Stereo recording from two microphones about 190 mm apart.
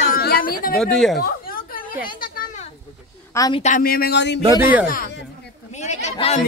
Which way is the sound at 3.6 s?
45° left (ahead or behind).